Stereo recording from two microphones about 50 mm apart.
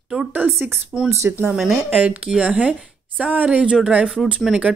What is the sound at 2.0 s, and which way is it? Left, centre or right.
Speech, right.